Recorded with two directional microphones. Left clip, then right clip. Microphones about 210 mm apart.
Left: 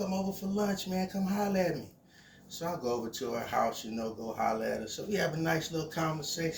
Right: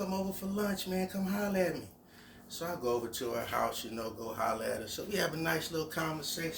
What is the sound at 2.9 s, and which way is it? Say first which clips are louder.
Speech: right 2 dB; 20° right (ahead or behind).